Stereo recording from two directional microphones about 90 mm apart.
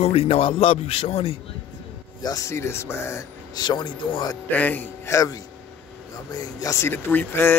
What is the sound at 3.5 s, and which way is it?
Speech, 55° left (ahead or behind).